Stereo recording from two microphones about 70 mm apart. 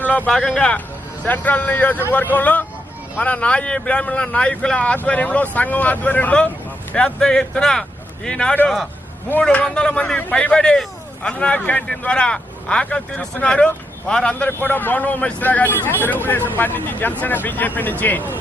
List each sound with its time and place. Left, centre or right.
0.0 s speech: left
0.3 s speech: centre
1.2 s speech: left
10.2 s speech: left